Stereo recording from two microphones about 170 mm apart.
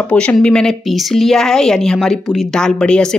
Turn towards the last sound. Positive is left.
turn(degrees=5)  # may be behind; listen again after turning